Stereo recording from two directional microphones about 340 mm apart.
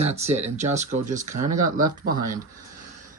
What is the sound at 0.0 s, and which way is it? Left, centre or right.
Speech, centre.